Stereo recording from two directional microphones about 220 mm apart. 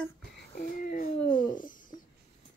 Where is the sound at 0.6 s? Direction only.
40° left (ahead or behind).